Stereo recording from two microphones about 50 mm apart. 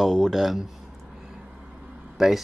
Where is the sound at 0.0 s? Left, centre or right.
Centre.